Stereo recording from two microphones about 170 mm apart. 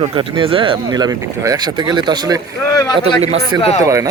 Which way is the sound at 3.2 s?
40° right (ahead or behind).